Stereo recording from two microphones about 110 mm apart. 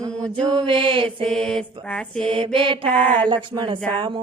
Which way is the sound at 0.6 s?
50° right (ahead or behind).